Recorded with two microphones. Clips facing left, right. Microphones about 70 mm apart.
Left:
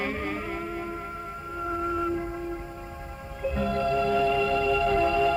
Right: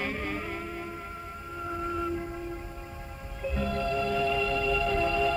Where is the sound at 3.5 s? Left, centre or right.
Left.